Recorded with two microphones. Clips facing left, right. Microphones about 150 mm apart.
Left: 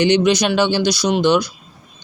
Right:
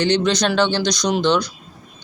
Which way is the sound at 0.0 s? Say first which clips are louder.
Left 3 dB; 10° left (ahead or behind).